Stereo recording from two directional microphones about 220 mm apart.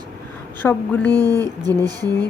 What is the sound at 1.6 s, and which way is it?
Speech, 15° right (ahead or behind).